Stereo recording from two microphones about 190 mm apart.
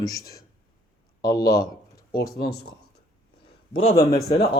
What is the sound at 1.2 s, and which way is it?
Speech, 20° left (ahead or behind).